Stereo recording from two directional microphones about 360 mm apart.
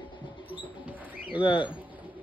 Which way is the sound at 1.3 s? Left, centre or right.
Centre.